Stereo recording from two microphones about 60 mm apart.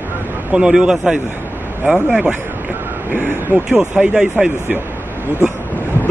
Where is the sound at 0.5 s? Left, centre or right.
Centre.